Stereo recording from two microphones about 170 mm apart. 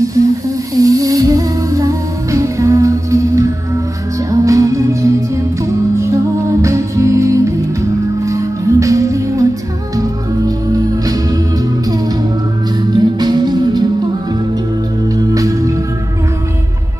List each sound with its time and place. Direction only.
0.2 s a sound: 20° right (ahead or behind)
0.7 s music: 20° right (ahead or behind)
6.6 s music: 15° right (ahead or behind)
13.2 s music: 25° right (ahead or behind)
15.3 s music: 20° right (ahead or behind)